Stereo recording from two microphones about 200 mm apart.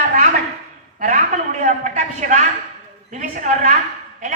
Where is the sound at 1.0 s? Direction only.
40° right (ahead or behind).